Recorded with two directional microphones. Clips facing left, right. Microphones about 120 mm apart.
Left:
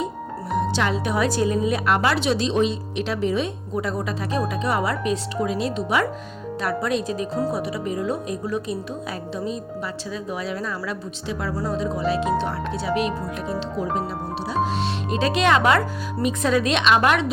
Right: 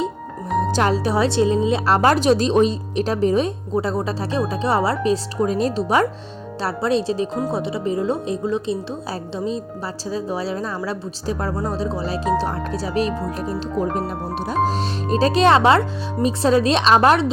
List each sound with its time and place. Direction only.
0.7 s speech: 40° right (ahead or behind)
2.0 s a woman's voice: 40° right (ahead or behind)
14.6 s speech: 40° right (ahead or behind)